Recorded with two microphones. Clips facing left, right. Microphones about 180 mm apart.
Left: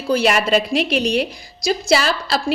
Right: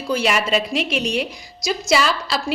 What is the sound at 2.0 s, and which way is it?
Speech, 55° left (ahead or behind).